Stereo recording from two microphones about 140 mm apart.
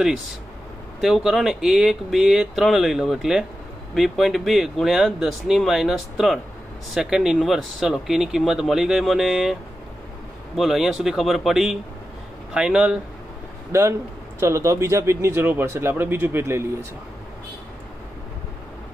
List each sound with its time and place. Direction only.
1.0 s speech: centre (ahead or behind)
13.7 s speech: 20° right (ahead or behind)